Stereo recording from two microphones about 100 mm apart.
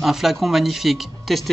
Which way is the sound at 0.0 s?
Centre (ahead or behind).